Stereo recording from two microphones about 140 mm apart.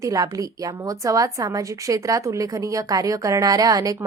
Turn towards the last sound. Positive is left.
turn(degrees=-25)  # may be behind; listen again after turning